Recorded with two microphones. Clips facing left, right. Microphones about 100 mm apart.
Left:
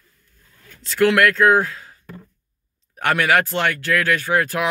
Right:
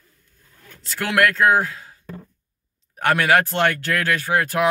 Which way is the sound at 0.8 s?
15° right (ahead or behind).